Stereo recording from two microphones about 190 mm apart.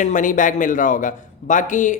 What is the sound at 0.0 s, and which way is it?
A man's voice, 40° left (ahead or behind).